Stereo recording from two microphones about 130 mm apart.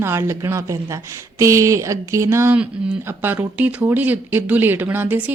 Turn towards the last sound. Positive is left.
turn(degrees=-15)  # may be behind; listen again after turning